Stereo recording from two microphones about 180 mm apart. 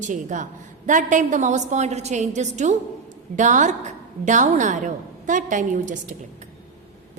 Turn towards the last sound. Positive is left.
turn(degrees=-45)  # may be behind; listen again after turning